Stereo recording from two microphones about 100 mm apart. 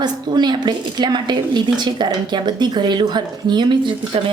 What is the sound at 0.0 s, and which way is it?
A woman's voice, 45° right (ahead or behind).